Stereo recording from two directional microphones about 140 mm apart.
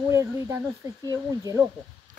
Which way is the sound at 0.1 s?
20° right (ahead or behind).